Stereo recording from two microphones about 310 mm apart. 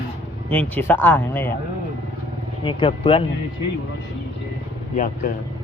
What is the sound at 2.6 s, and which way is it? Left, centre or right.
Speech, centre.